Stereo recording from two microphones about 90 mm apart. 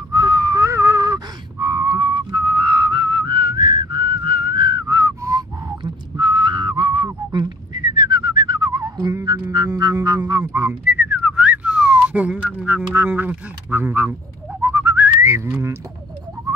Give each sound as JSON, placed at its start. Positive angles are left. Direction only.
{"t": 0.1, "sound": "a sound", "side_deg": -50}
{"t": 6.1, "sound": "whistling", "side_deg": -60}
{"t": 9.1, "sound": "music", "side_deg": -40}
{"t": 10.9, "sound": "whistling", "side_deg": -20}